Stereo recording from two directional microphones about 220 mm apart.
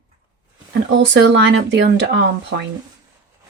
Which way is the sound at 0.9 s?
55° right (ahead or behind).